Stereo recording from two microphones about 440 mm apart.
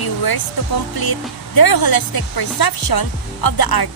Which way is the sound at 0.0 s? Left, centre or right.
Left.